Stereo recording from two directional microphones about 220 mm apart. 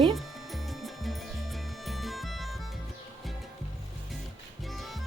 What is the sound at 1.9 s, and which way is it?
Music, centre (ahead or behind).